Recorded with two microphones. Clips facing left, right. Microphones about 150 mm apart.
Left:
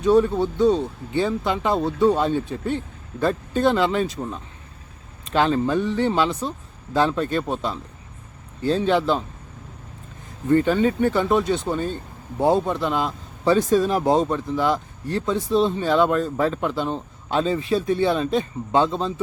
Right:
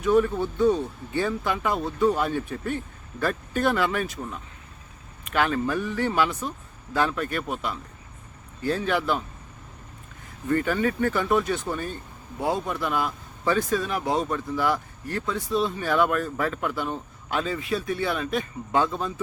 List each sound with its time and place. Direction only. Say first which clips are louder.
0.3 s speech: left 3 dB; 20° left (ahead or behind)
10.5 s speech: left 6 dB; 25° left (ahead or behind)